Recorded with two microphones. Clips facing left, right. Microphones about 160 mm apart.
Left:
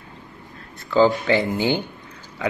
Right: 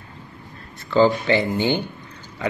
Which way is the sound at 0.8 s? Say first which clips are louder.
Even; centre (ahead or behind).